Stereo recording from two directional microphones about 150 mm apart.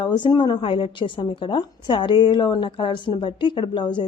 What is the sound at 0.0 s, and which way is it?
A woman's voice, 30° left (ahead or behind).